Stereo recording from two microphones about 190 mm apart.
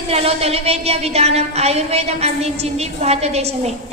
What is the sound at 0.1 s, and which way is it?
A woman's voice, 30° right (ahead or behind).